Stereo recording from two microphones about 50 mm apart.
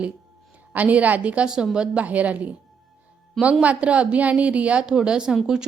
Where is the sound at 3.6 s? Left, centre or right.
Right.